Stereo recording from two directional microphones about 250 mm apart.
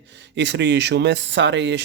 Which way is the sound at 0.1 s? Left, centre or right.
Right.